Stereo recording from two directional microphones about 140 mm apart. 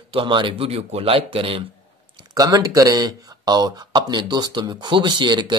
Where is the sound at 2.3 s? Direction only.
25° right (ahead or behind).